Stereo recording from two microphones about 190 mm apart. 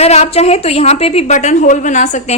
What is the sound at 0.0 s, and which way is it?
A woman's voice, 35° left (ahead or behind).